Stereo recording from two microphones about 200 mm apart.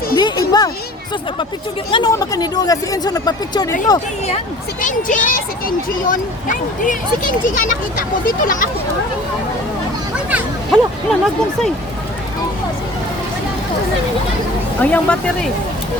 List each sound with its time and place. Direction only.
0.2 s music: 20° left (ahead or behind)
1.9 s speech: 20° left (ahead or behind)
4.8 s speech: 40° left (ahead or behind)
10.2 s a sound: 5° right (ahead or behind)
14.8 s speech: 5° left (ahead or behind)